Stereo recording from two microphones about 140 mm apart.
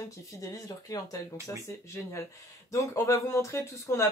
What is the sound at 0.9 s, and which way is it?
Speech, 25° left (ahead or behind).